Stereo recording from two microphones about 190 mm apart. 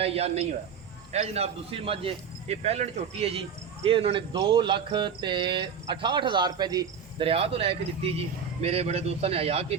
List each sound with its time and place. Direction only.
0.0 s speech: 30° right (ahead or behind)